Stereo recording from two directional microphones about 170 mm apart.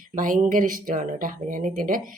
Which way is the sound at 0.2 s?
50° right (ahead or behind).